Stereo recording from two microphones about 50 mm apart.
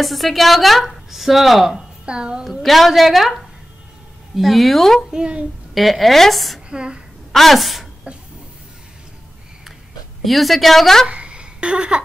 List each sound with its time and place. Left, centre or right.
0.0 s a woman's voice: centre
2.4 s a woman's voice: centre
5.1 s a woman's voice: centre
5.8 s a woman's voice: centre
6.7 s speech: centre
7.3 s speech: centre
10.2 s a woman's voice: centre
11.1 s a sound: right